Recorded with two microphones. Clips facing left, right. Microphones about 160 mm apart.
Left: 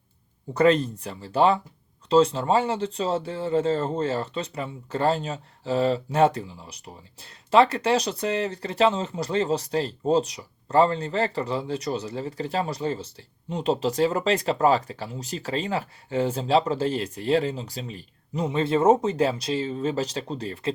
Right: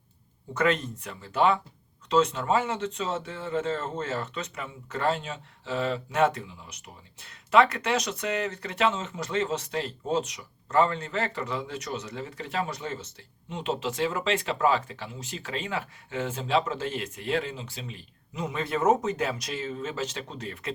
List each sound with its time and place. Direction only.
0.5 s speech: 35° left (ahead or behind)